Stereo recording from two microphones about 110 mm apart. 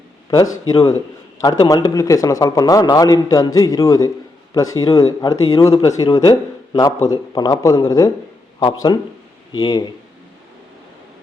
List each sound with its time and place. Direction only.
0.3 s a man's voice: 40° left (ahead or behind)
5.7 s speech: 60° left (ahead or behind)
6.0 s a man's voice: 35° left (ahead or behind)